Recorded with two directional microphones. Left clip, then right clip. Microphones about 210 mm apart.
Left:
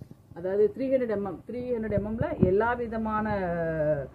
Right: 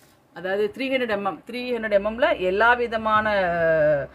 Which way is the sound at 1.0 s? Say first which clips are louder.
Right 5 dB; 50° right (ahead or behind).